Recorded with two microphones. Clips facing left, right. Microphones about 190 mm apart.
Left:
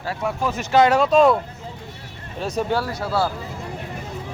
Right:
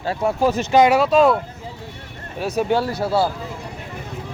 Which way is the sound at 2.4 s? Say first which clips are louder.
Right 3 dB; 10° right (ahead or behind).